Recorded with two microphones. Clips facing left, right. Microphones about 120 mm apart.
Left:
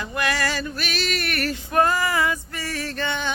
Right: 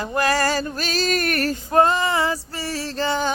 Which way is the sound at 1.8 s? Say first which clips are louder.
Right 3 dB; 25° right (ahead or behind).